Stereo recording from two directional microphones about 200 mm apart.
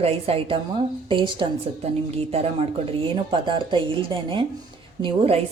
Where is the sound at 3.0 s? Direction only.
25° right (ahead or behind).